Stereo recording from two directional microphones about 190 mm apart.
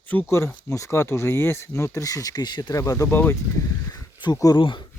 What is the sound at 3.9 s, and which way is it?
Speech, 20° left (ahead or behind).